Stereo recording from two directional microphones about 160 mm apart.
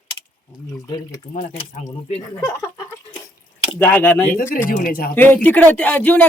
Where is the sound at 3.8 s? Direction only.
10° left (ahead or behind).